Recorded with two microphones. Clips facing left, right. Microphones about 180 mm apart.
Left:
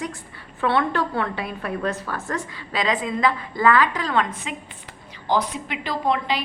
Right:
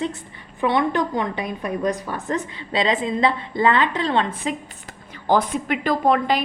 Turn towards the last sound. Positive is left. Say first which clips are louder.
# right 5 dB
turn(degrees=-50)  # may be behind; listen again after turning